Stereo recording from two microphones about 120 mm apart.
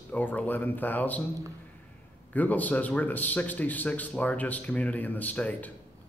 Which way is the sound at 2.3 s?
15° left (ahead or behind).